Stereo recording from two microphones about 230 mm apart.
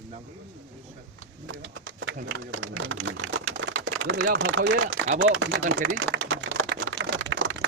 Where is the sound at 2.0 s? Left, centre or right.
Right.